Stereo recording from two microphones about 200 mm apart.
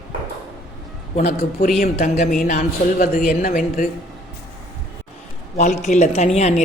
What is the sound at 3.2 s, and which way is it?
Speech, 45° left (ahead or behind).